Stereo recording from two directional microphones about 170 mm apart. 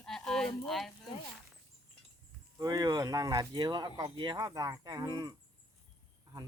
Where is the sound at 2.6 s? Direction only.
20° right (ahead or behind).